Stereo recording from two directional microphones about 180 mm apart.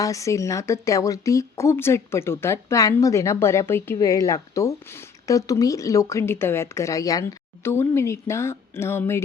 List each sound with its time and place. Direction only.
0.0 s speech: 15° left (ahead or behind)